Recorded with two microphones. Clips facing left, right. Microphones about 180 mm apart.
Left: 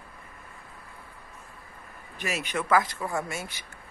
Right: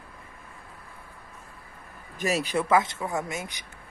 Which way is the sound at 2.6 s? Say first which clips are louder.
Left 2 dB; 25° right (ahead or behind).